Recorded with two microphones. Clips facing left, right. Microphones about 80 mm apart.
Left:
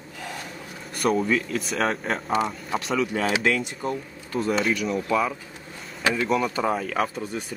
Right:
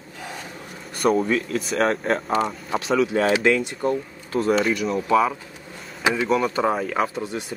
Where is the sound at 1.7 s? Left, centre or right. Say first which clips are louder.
Right 4 dB; right.